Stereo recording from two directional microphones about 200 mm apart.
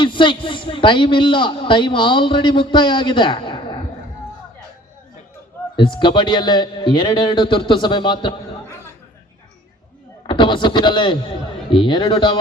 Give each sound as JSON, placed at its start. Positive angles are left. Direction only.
{"t": 0.0, "sound": "a man's voice", "side_deg": 25}
{"t": 5.7, "sound": "a man's voice", "side_deg": 25}
{"t": 10.2, "sound": "a man's voice", "side_deg": 25}